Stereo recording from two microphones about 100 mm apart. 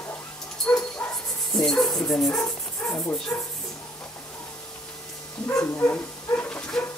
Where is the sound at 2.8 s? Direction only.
25° left (ahead or behind).